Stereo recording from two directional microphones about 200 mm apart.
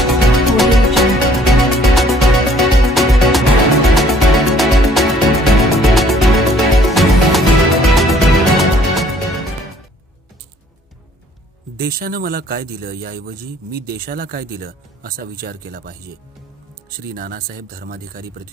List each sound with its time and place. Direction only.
0.0 s music: centre (ahead or behind)
11.8 s a man's voice: 50° right (ahead or behind)
17.0 s a man's voice: 45° right (ahead or behind)